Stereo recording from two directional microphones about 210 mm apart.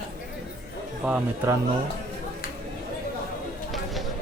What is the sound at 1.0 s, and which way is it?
Speech, 5° right (ahead or behind).